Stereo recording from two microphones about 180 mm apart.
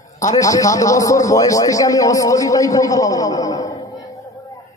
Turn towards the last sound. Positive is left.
turn(degrees=20)  # may be behind; listen again after turning